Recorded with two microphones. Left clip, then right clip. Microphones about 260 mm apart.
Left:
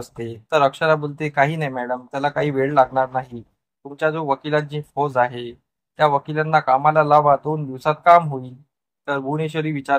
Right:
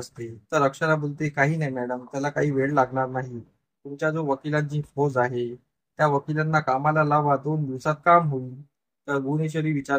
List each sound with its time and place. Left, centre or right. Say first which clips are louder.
0.5 s speech: left 5 dB; centre
4.5 s speech: left 6 dB; centre